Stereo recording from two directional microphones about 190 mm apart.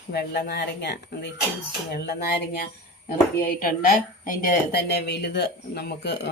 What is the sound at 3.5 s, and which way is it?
A woman's voice, 45° left (ahead or behind).